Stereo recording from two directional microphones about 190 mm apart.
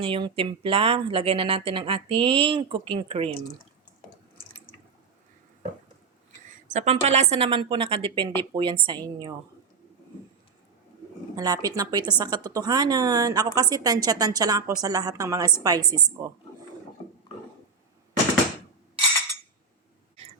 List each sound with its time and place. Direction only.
0.0 s a woman's voice: 30° right (ahead or behind)
6.7 s a woman's voice: 35° right (ahead or behind); by 9.3 s 20° right (ahead or behind)
11.3 s a woman's voice: 20° right (ahead or behind)